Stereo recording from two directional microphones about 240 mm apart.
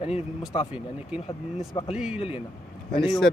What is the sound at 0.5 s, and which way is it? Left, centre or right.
Speech, left.